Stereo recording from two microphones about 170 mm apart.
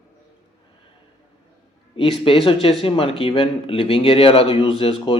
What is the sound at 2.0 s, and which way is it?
Speech, 30° left (ahead or behind).